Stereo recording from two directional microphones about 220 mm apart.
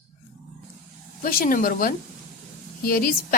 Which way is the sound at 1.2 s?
40° left (ahead or behind).